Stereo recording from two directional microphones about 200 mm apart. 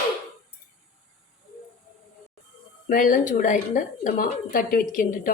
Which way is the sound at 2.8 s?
45° left (ahead or behind).